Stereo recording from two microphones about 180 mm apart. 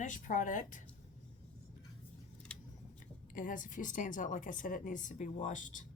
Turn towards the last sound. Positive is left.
turn(degrees=45)  # may be behind; listen again after turning